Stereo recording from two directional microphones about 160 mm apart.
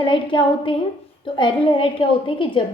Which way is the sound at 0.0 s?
30° left (ahead or behind).